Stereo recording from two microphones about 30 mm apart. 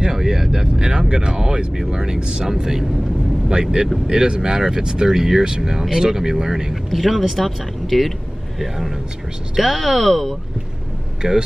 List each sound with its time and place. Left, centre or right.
0.0 s a sound: centre
1.9 s speech: right
2.1 s speech: right
2.4 s speech: centre
4.1 s speech: right
6.7 s speech: centre
11.2 s speech: centre